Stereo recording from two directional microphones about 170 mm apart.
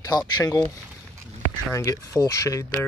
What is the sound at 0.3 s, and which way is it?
Speech, 25° left (ahead or behind).